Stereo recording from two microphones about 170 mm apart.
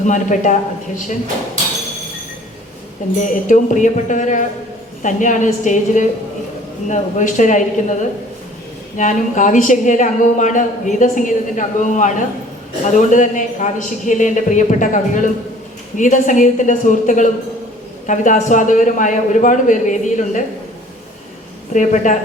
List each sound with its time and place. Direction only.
0.0 s speech: 45° left (ahead or behind)
3.2 s speech: 50° left (ahead or behind)
9.0 s speech: 50° left (ahead or behind)
21.7 s speech: 45° left (ahead or behind)